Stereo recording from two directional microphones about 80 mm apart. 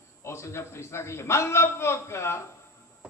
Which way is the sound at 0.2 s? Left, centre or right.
Left.